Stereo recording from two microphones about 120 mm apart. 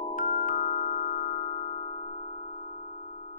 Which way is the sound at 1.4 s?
55° left (ahead or behind).